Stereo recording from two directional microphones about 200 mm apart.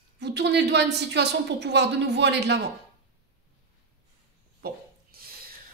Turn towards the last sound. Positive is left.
turn(degrees=-50)  # may be behind; listen again after turning